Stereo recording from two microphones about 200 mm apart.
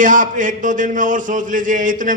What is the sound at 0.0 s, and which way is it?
A man's voice, 40° right (ahead or behind).